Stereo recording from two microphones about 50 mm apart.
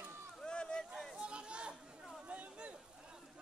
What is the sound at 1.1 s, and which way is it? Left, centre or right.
Chatter, centre.